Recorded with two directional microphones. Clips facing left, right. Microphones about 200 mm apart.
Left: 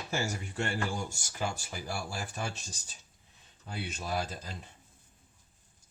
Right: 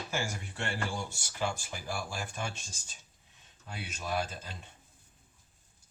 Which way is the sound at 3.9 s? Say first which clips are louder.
Right 1 dB; 35° left (ahead or behind).